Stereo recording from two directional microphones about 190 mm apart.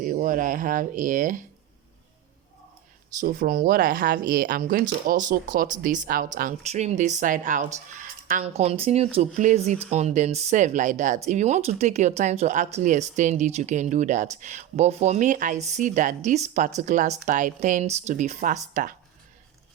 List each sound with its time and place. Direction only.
0.0 s speech: 45° right (ahead or behind)
3.2 s speech: 50° right (ahead or behind)